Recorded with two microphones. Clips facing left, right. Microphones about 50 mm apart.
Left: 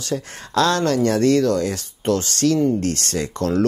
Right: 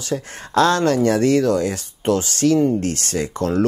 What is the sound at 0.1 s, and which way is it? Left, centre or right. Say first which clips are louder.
Speech: right 2 dB; centre.